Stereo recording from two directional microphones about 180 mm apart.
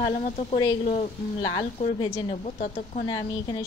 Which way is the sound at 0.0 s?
25° left (ahead or behind).